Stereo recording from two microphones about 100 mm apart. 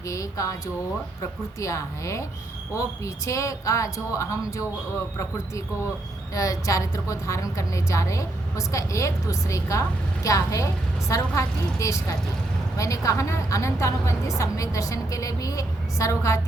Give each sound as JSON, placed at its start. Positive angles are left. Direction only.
{"t": 0.1, "sound": "a woman's voice", "side_deg": 30}
{"t": 1.5, "sound": "a woman's voice", "side_deg": 30}
{"t": 6.3, "sound": "a woman's voice", "side_deg": 35}